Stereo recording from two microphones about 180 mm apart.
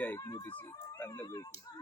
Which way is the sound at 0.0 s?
15° left (ahead or behind).